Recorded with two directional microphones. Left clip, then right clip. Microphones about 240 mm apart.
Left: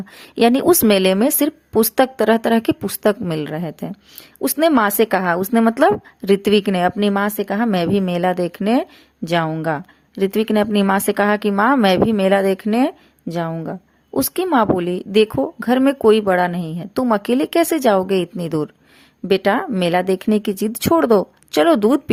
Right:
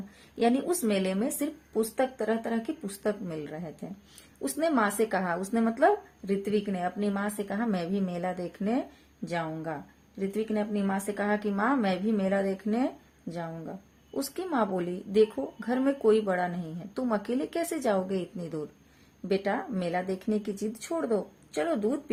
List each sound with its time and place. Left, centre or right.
0.3 s a woman's voice: left